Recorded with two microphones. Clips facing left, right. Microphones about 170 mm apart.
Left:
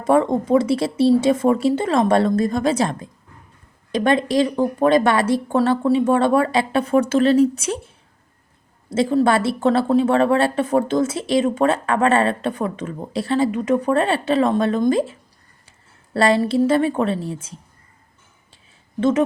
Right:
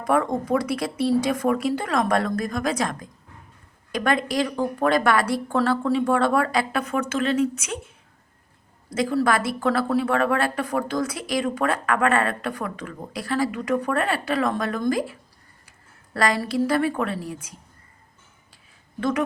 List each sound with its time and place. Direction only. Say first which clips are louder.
0.0 s speech: left 5 dB; 25° left (ahead or behind)
8.9 s speech: left 5 dB; 25° left (ahead or behind)
18.9 s speech: left 6 dB; 20° left (ahead or behind)